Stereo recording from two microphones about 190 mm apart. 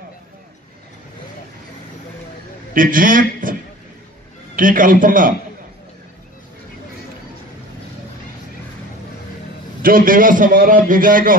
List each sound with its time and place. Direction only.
2.7 s a man's voice: 45° right (ahead or behind)
4.6 s a man's voice: 45° right (ahead or behind)
9.8 s a man's voice: 50° right (ahead or behind)